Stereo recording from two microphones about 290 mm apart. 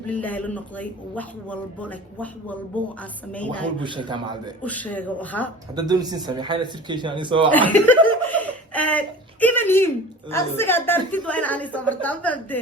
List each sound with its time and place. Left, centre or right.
0.2 s a woman's voice: centre
3.3 s a woman's voice: centre
3.8 s speech: centre
4.6 s a woman's voice: centre
5.7 s speech: centre
7.5 s a woman's voice: centre
8.3 s a sound: centre
10.3 s a woman's voice: centre